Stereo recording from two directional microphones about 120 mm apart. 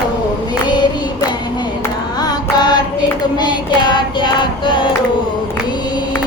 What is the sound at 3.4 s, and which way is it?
Child singing, 40° left (ahead or behind).